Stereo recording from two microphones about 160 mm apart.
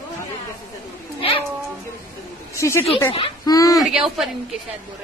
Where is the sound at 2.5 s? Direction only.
20° left (ahead or behind).